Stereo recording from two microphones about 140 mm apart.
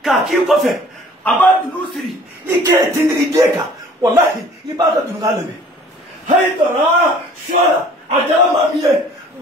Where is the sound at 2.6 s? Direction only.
20° right (ahead or behind).